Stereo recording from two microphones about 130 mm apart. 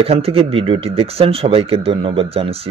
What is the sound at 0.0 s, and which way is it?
Speech, 50° right (ahead or behind).